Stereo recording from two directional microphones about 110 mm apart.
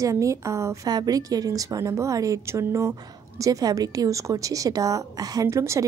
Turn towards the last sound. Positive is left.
turn(degrees=-25)  # may be behind; listen again after turning